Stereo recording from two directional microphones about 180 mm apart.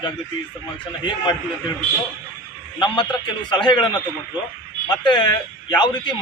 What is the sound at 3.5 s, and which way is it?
Speech, 25° left (ahead or behind).